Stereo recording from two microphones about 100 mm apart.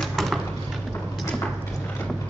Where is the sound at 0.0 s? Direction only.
Centre (ahead or behind).